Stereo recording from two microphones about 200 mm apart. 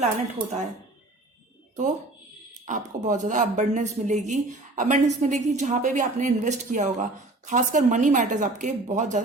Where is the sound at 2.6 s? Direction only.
40° right (ahead or behind).